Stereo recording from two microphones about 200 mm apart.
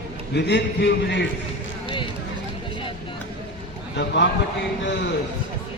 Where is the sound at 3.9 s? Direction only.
60° left (ahead or behind).